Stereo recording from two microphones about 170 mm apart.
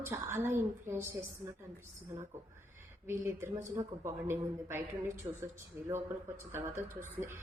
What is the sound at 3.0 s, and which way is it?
A woman's voice, 15° right (ahead or behind).